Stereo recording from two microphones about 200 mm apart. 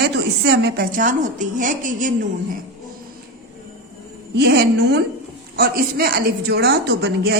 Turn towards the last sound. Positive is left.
turn(degrees=-55)  # may be behind; listen again after turning